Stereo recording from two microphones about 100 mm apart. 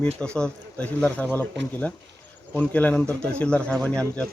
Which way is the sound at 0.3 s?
10° left (ahead or behind).